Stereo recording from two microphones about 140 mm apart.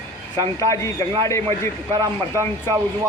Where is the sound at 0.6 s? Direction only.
20° left (ahead or behind).